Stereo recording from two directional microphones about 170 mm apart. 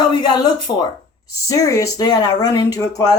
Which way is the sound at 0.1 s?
25° left (ahead or behind).